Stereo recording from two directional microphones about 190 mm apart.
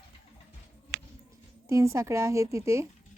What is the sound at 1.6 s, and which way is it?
Speech, 15° right (ahead or behind).